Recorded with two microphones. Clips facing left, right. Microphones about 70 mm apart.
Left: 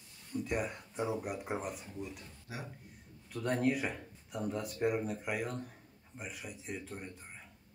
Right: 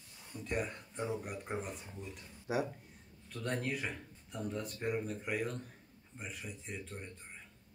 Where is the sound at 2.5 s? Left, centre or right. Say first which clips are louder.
Right 11 dB; right.